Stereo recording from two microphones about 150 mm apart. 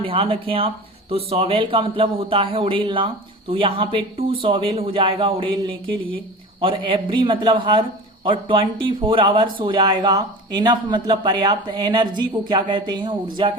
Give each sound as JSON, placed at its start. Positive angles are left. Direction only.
{"t": 0.0, "sound": "a man's voice", "side_deg": -35}